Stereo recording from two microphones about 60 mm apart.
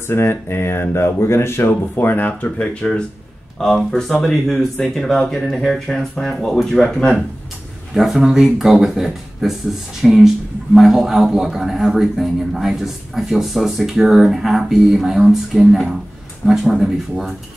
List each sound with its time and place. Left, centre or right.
0.1 s speech: left
1.7 s speech: left
2.6 s speech: centre
7.9 s speech: centre
16.4 s speech: centre